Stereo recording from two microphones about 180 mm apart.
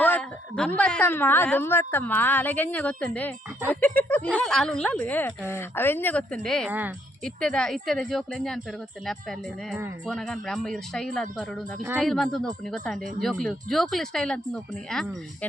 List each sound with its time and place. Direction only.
0.0 s a woman's voice: 5° left (ahead or behind)
6.7 s speech: 10° right (ahead or behind)
7.3 s speech: 5° left (ahead or behind)
10.1 s speech: centre (ahead or behind)
13.0 s speech: 50° right (ahead or behind)
13.2 s speech: centre (ahead or behind)